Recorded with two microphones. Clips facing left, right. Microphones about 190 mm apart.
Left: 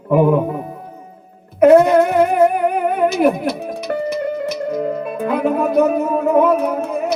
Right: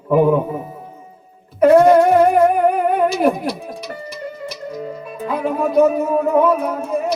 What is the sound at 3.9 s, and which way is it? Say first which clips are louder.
Music: left 10 dB; 60° left (ahead or behind).